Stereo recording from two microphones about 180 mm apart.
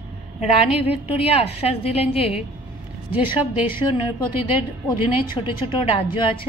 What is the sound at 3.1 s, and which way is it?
A woman's voice, 10° right (ahead or behind).